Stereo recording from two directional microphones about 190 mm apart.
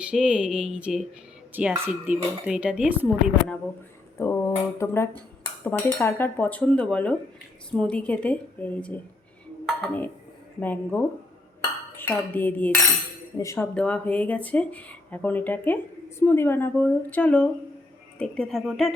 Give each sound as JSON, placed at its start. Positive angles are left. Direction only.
{"t": 0.0, "sound": "speech", "side_deg": -5}
{"t": 4.2, "sound": "speech", "side_deg": 15}